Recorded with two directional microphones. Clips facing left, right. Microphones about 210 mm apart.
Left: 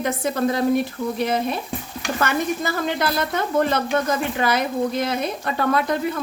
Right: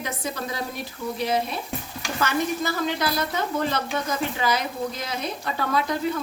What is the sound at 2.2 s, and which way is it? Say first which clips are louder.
Speech: left 1 dB; 55° left (ahead or behind).